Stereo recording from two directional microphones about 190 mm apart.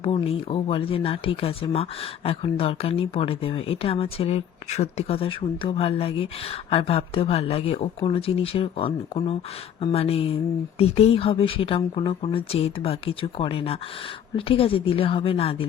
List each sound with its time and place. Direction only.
0.0 s speech: 30° left (ahead or behind)